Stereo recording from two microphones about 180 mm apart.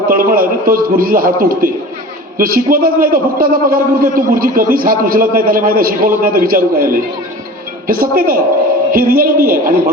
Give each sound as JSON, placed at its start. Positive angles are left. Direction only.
{"t": 0.1, "sound": "a man's voice", "side_deg": -50}